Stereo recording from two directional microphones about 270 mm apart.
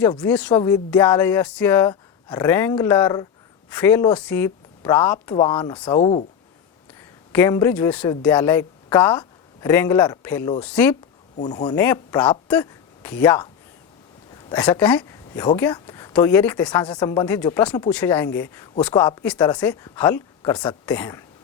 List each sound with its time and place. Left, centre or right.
0.2 s speech: centre
7.3 s a man's voice: centre
14.5 s speech: centre